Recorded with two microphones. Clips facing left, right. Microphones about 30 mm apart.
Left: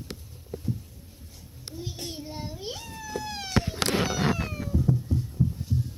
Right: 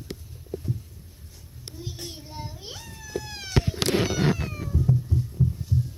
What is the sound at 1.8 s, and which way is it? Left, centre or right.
Child singing, left.